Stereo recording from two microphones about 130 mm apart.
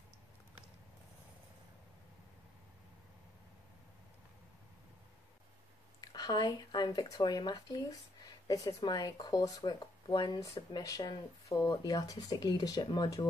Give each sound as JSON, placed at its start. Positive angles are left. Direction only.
{"t": 5.9, "sound": "speech", "side_deg": 30}